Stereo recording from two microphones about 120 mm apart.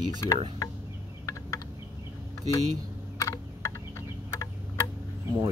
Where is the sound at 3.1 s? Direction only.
30° left (ahead or behind).